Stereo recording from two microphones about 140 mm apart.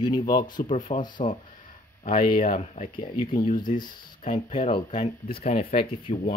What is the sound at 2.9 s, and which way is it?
Speech, 35° left (ahead or behind).